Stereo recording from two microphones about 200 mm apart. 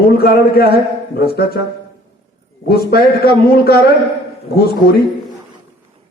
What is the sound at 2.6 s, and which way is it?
A man's voice, 50° left (ahead or behind).